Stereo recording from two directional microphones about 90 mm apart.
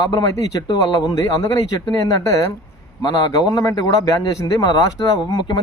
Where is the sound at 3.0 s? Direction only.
50° left (ahead or behind).